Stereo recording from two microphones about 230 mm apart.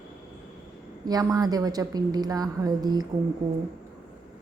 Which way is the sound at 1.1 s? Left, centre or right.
Centre.